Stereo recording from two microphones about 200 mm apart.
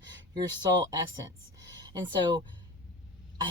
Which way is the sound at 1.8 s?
20° right (ahead or behind).